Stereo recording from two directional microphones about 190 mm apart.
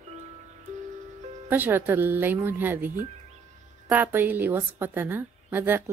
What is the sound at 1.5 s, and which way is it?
A woman's voice, 10° right (ahead or behind).